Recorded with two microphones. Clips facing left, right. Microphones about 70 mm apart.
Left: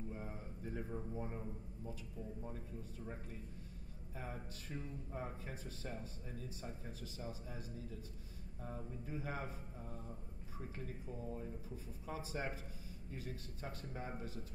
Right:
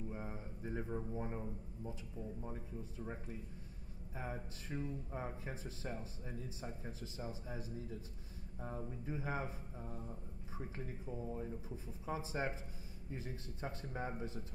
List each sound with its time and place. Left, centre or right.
0.1 s a man's voice: centre
4.1 s speech: right
11.1 s speech: centre